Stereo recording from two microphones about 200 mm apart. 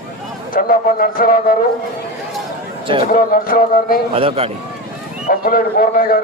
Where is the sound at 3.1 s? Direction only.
45° left (ahead or behind).